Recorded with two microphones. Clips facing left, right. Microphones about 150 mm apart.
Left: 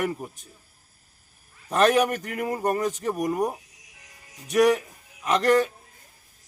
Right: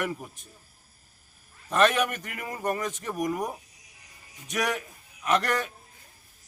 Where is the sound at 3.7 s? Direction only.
90° left.